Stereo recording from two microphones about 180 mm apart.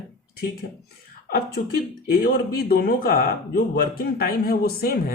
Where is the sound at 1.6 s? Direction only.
50° left (ahead or behind).